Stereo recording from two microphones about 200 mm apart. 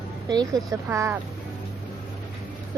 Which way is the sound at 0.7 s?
15° right (ahead or behind).